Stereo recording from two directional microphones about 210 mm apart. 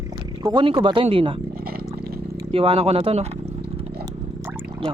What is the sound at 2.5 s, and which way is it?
Speech, 25° right (ahead or behind).